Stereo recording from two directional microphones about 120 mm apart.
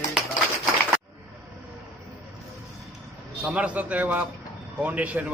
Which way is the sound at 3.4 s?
10° right (ahead or behind).